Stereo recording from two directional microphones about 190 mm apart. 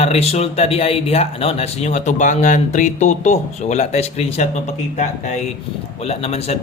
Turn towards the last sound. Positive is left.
turn(degrees=35)  # may be behind; listen again after turning